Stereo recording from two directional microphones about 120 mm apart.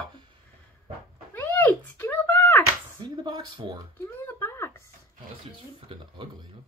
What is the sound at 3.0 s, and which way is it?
Speech, 40° right (ahead or behind).